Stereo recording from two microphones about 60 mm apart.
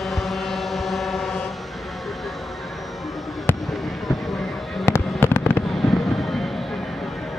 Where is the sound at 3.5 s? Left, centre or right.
Left.